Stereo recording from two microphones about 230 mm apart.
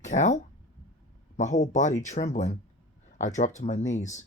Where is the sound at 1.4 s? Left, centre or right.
Left.